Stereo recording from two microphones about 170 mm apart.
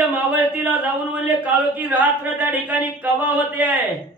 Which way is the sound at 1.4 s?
10° right (ahead or behind).